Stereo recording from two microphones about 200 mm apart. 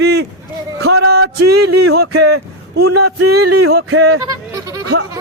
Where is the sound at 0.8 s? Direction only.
90° right.